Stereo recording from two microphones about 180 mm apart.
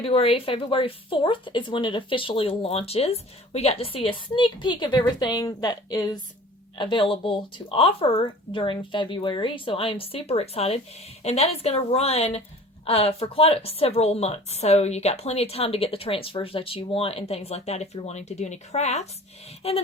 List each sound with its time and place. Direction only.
0.0 s a woman's voice: 30° left (ahead or behind)